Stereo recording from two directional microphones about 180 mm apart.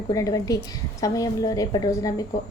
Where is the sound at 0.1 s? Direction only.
20° left (ahead or behind).